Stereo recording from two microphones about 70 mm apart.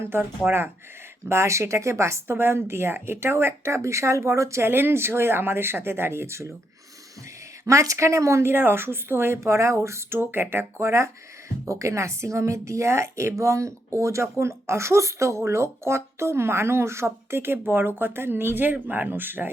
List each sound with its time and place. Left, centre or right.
0.1 s speech: right
7.6 s speech: right
10.8 s speech: right